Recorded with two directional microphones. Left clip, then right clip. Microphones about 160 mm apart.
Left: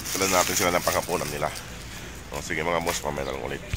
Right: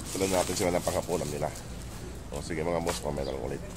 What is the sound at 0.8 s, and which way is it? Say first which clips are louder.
Speech: left 5 dB; 10° left (ahead or behind).